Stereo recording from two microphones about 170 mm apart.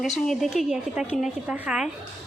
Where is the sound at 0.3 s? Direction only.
Centre (ahead or behind).